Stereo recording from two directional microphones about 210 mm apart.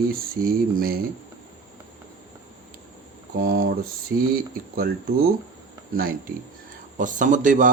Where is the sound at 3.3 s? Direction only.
45° right (ahead or behind).